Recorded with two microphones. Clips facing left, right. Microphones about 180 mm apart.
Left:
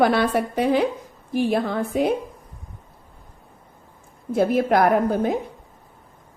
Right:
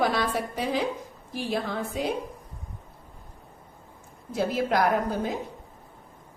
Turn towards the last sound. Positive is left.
turn(degrees=55)  # may be behind; listen again after turning